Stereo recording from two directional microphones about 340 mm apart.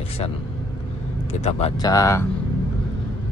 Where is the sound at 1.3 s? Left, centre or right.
Centre.